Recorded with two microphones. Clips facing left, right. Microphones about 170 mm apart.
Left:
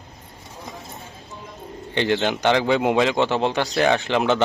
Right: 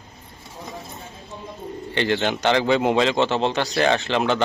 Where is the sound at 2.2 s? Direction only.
15° left (ahead or behind).